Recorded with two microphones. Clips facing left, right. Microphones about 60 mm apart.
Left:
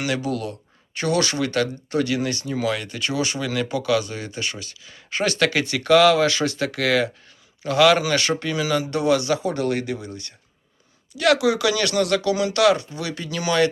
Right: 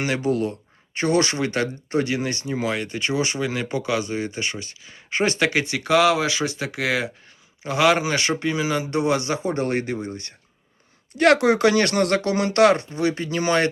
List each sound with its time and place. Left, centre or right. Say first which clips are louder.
0.0 s speech: right 3 dB; right